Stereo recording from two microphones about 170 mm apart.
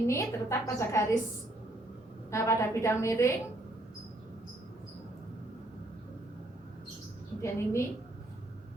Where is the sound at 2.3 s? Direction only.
15° left (ahead or behind).